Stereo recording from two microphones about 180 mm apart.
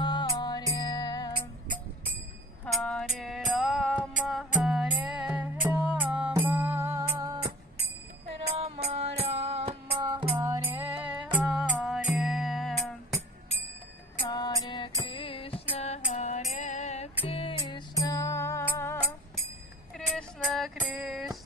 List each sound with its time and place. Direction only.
0.0 s music: 25° left (ahead or behind)
2.6 s music: 5° left (ahead or behind); by 7.3 s 20° right (ahead or behind)
8.5 s music: 35° right (ahead or behind); by 13.2 s centre (ahead or behind)
14.3 s music: 20° left (ahead or behind)
20.2 s music: centre (ahead or behind)